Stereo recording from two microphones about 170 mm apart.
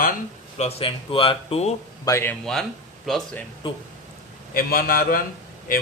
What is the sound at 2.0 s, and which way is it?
Speech, 15° left (ahead or behind).